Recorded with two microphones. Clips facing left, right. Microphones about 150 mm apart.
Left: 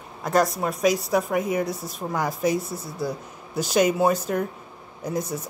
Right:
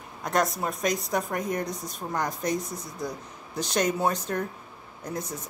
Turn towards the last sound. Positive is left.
turn(degrees=10)  # may be behind; listen again after turning